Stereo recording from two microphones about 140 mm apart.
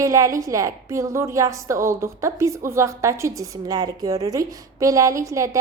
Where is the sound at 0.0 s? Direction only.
25° right (ahead or behind).